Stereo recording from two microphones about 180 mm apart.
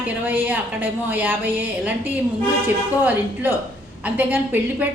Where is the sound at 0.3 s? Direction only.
10° right (ahead or behind).